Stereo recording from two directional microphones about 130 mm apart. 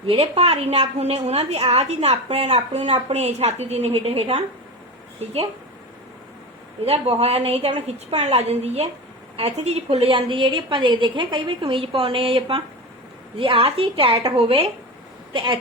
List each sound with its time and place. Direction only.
0.1 s a woman's voice: 50° right (ahead or behind)
6.8 s a woman's voice: 50° right (ahead or behind)